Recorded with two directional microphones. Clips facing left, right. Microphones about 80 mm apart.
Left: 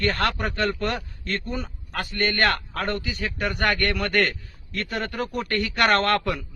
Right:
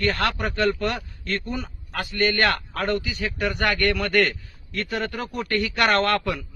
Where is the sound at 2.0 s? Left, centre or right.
Left.